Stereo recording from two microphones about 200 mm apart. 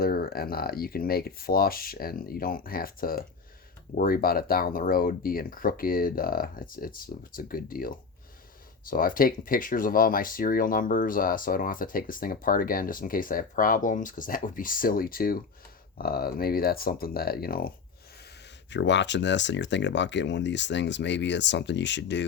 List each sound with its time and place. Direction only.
0.0 s speech: 50° left (ahead or behind)
18.7 s speech: 60° left (ahead or behind)